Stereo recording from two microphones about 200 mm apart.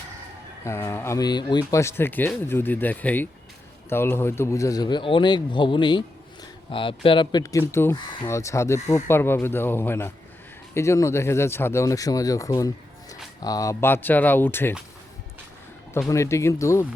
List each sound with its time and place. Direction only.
0.6 s speech: 15° left (ahead or behind)
16.0 s speech: 15° left (ahead or behind)